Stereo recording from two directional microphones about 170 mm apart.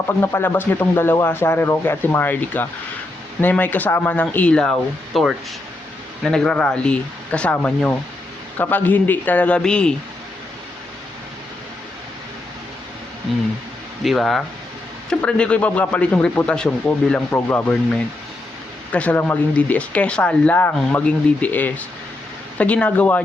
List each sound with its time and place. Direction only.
0.2 s a man's voice: 15° left (ahead or behind)
14.0 s a man's voice: centre (ahead or behind)
18.9 s a man's voice: 10° left (ahead or behind)